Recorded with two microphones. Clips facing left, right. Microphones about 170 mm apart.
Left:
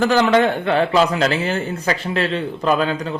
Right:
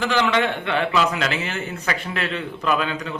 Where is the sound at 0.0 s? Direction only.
45° left (ahead or behind).